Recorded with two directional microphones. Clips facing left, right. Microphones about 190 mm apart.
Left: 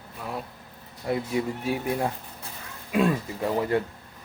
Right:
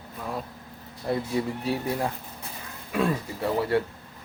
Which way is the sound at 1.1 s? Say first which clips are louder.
Even; 15° left (ahead or behind).